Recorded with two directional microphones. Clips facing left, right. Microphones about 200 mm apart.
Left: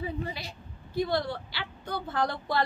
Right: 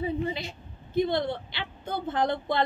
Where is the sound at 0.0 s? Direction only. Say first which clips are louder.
Right 5 dB; 20° right (ahead or behind).